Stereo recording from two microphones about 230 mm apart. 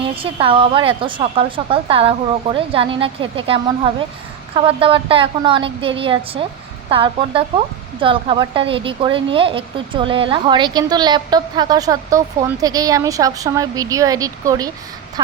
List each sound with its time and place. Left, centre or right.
0.0 s a woman's voice: right